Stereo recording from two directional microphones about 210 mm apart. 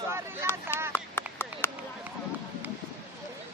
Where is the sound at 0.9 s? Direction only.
10° left (ahead or behind).